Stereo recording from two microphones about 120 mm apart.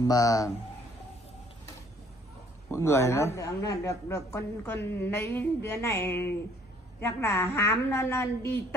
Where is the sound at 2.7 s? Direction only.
20° left (ahead or behind).